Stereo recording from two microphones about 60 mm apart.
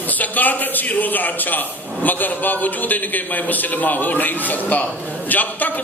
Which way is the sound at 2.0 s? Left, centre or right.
Left.